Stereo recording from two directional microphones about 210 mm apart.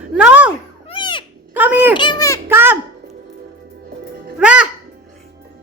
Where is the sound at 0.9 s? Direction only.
25° left (ahead or behind).